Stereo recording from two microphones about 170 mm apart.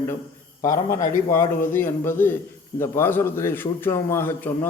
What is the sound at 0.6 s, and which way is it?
A man's voice, 20° left (ahead or behind).